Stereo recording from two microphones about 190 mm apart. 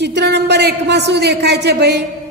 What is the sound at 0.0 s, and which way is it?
A man's voice, 65° right (ahead or behind).